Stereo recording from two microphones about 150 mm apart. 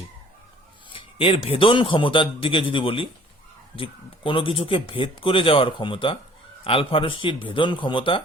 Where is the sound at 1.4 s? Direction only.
35° left (ahead or behind).